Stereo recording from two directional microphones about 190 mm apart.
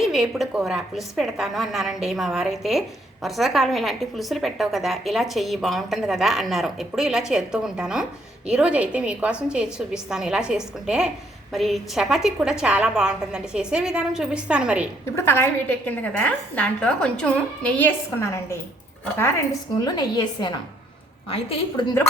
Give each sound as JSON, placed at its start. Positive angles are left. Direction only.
{"t": 0.0, "sound": "a woman's voice", "side_deg": 0}
{"t": 15.0, "sound": "a woman's voice", "side_deg": 15}
{"t": 19.8, "sound": "a woman's voice", "side_deg": 20}